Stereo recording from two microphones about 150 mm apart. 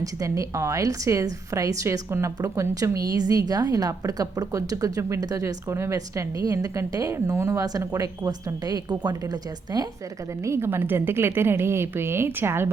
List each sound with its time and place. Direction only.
0.0 s a woman's voice: 25° right (ahead or behind)